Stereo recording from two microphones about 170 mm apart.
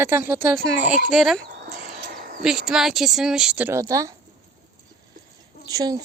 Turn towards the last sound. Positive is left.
turn(degrees=-20)  # may be behind; listen again after turning